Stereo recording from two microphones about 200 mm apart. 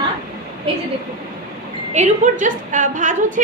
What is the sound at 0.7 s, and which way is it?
Speech, 25° right (ahead or behind).